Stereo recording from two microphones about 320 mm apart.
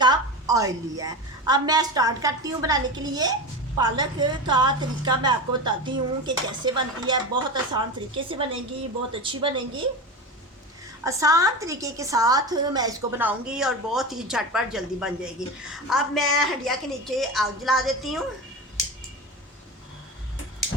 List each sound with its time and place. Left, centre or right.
0.0 s a woman's voice: centre
11.0 s a woman's voice: centre